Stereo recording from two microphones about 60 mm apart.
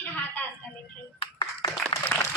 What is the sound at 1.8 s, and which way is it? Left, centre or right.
Applause, left.